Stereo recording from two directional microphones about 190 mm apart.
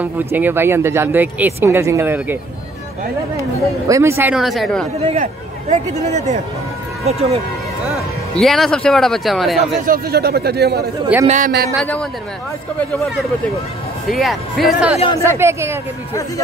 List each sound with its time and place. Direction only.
0.0 s speech: 10° right (ahead or behind)
3.9 s a man's voice: 15° right (ahead or behind)
4.9 s speech: 35° right (ahead or behind)
8.4 s a man's voice: centre (ahead or behind)
9.8 s speech: 55° right (ahead or behind)
11.2 s speech: 40° right (ahead or behind)
11.7 s a man's voice: 5° left (ahead or behind)
14.0 s a man's voice: centre (ahead or behind)
15.2 s speech: 15° right (ahead or behind)